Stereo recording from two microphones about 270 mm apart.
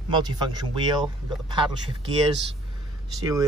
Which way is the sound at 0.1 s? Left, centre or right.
Centre.